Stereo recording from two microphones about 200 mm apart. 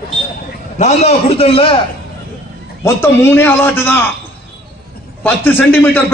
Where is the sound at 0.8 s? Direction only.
30° left (ahead or behind).